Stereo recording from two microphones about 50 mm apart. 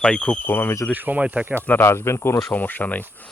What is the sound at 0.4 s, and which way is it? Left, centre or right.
Speech, left.